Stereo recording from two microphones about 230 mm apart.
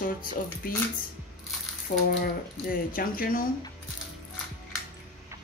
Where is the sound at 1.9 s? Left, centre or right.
Left.